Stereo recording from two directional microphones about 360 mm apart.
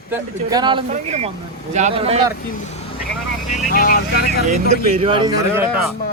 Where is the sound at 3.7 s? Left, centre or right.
Left.